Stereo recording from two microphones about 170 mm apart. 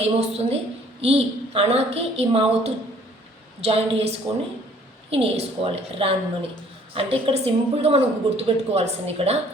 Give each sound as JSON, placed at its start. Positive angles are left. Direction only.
{"t": 0.0, "sound": "a woman's voice", "side_deg": -40}